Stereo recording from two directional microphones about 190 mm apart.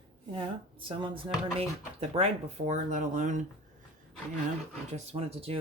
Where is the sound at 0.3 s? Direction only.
25° right (ahead or behind).